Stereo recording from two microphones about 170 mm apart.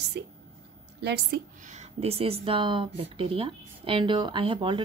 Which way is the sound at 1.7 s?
40° right (ahead or behind).